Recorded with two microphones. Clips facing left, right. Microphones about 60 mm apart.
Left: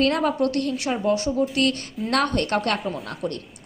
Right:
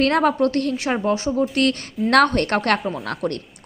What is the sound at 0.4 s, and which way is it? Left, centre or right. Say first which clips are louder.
Speech: right 3 dB; right.